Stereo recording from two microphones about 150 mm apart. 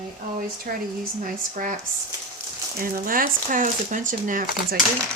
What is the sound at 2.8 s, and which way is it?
Speech, 70° right (ahead or behind).